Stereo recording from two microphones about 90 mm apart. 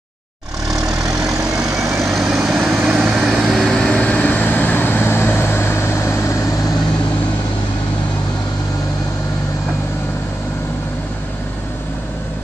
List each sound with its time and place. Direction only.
0.7 s vehicle: 40° right (ahead or behind)
1.8 s vehicle: centre (ahead or behind)
3.9 s vehicle: 15° left (ahead or behind); by 6.3 s 30° left (ahead or behind)